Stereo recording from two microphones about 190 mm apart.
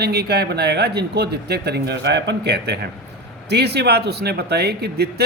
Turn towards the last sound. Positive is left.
turn(degrees=-55)  # may be behind; listen again after turning